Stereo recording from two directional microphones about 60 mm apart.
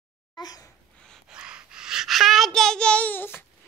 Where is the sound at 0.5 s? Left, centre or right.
Left.